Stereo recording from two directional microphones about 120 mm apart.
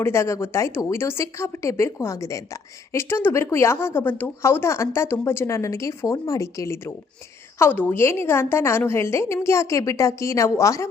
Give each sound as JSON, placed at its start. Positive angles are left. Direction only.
{"t": 0.0, "sound": "a woman's voice", "side_deg": 25}